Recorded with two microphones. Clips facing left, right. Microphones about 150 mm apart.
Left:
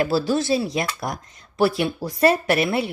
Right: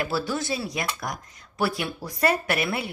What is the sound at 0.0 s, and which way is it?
Speech, 30° left (ahead or behind).